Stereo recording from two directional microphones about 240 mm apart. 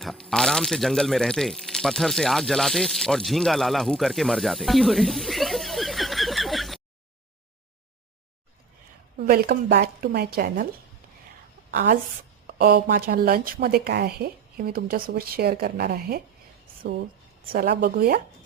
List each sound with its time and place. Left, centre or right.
0.0 s speech: centre
9.1 s a woman's voice: right
11.7 s a woman's voice: right
17.5 s a woman's voice: right